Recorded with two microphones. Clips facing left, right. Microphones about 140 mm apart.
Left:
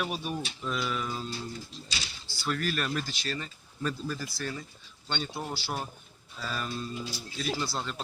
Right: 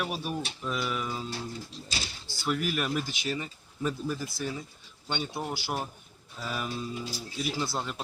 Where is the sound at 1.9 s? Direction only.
50° right (ahead or behind).